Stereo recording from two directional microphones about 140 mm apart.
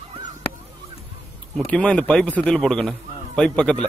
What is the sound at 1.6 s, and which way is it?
A man's voice, 10° left (ahead or behind).